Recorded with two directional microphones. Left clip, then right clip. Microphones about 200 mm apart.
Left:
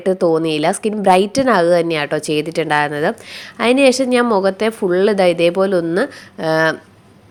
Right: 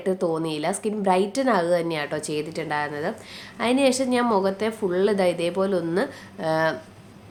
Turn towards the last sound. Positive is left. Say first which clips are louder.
# left 7 dB
turn(degrees=30)  # may be behind; listen again after turning